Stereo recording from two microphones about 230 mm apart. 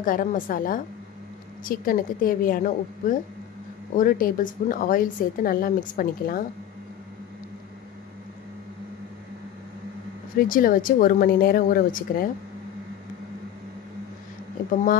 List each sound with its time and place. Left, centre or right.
0.0 s a woman's voice: left
10.5 s a woman's voice: left